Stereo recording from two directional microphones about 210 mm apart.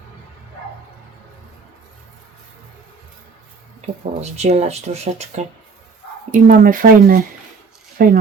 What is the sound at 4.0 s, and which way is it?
Speech, 30° right (ahead or behind).